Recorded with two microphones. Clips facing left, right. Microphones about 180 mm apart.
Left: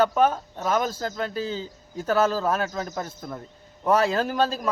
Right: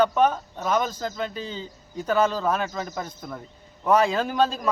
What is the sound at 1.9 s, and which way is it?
Speech, 40° left (ahead or behind).